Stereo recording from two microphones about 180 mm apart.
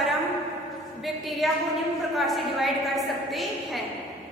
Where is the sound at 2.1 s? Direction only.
Centre (ahead or behind).